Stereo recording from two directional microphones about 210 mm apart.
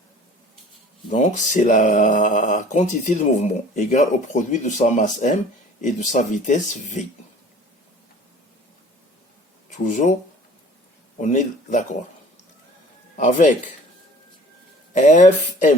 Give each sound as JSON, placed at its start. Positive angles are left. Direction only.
{"t": 1.1, "sound": "speech", "side_deg": 35}
{"t": 9.6, "sound": "speech", "side_deg": 35}
{"t": 11.2, "sound": "speech", "side_deg": 35}
{"t": 13.1, "sound": "speech", "side_deg": 35}
{"t": 14.9, "sound": "speech", "side_deg": 35}